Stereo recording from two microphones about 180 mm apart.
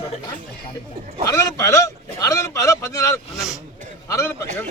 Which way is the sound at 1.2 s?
15° left (ahead or behind).